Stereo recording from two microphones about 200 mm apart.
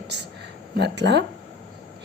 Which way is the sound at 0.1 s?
60° right (ahead or behind).